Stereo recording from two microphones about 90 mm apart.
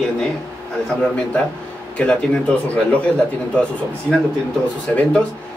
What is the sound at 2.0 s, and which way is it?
Speech, 15° left (ahead or behind).